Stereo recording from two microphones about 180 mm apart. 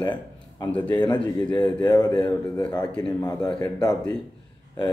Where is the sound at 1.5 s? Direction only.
25° left (ahead or behind).